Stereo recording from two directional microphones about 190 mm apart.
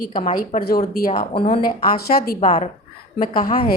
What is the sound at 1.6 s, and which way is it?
Speech, 50° left (ahead or behind).